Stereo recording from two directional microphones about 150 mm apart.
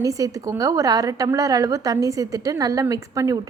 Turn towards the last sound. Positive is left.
turn(degrees=-20)  # may be behind; listen again after turning